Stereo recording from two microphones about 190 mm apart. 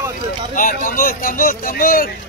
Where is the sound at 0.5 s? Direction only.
45° left (ahead or behind).